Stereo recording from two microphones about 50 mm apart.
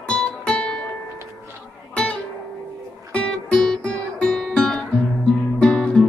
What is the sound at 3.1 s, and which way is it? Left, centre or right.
Music, left.